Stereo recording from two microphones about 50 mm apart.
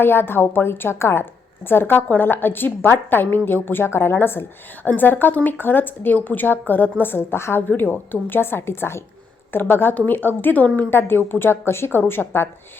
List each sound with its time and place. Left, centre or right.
0.0 s a woman's voice: left
4.9 s a woman's voice: left
7.7 s a woman's voice: left
11.3 s a woman's voice: left